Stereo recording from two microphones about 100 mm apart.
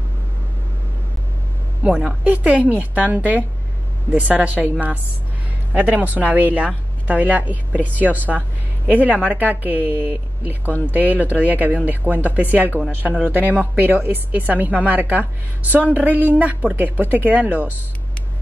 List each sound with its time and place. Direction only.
1.8 s speech: 10° right (ahead or behind)